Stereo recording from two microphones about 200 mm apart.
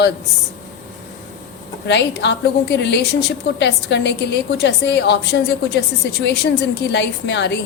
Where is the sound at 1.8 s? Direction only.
60° left (ahead or behind).